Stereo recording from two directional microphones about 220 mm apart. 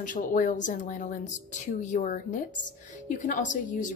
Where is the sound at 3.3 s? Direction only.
35° left (ahead or behind).